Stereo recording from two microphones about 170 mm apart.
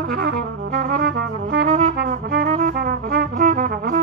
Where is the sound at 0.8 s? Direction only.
60° right (ahead or behind).